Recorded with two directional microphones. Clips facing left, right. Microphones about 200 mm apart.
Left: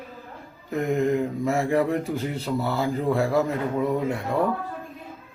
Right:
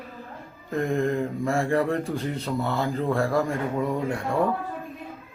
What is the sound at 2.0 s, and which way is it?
A man's voice, centre (ahead or behind).